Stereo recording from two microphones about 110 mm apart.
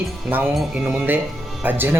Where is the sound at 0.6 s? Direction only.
5° right (ahead or behind).